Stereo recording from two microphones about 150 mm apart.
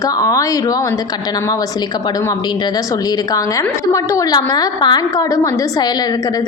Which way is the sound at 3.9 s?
25° left (ahead or behind).